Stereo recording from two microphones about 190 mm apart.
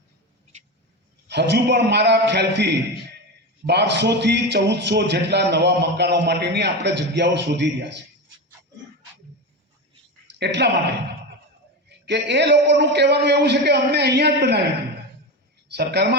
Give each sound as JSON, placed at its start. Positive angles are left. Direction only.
{"t": 1.3, "sound": "a man's voice", "side_deg": -60}
{"t": 10.3, "sound": "a man's voice", "side_deg": -60}
{"t": 15.7, "sound": "a man's voice", "side_deg": -60}